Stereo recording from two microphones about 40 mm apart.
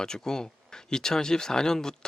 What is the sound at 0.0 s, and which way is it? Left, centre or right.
Speech, centre.